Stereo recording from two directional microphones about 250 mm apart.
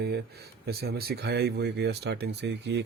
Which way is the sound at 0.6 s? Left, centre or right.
Right.